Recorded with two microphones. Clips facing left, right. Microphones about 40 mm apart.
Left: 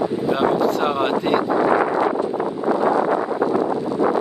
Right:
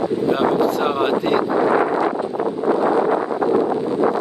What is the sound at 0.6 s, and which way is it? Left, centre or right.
Wind noise, centre.